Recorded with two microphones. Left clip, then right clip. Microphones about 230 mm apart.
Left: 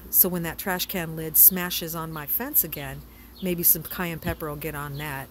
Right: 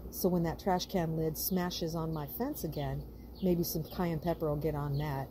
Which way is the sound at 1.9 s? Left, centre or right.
Left.